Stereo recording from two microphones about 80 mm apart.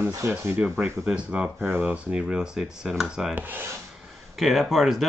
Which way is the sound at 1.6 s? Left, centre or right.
Right.